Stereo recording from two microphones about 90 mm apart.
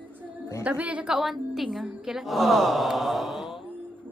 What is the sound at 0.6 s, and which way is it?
Speech, 15° right (ahead or behind).